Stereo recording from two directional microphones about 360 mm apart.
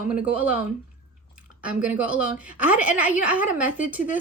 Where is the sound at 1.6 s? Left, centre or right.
Centre.